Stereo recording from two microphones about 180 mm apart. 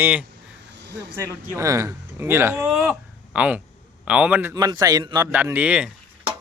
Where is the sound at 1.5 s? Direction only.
15° right (ahead or behind).